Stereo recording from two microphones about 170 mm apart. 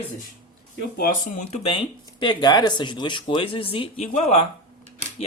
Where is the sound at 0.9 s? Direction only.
50° left (ahead or behind).